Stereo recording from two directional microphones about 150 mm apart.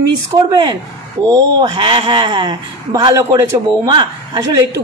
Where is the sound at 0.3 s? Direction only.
25° right (ahead or behind).